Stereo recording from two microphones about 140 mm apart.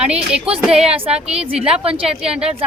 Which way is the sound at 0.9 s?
45° right (ahead or behind).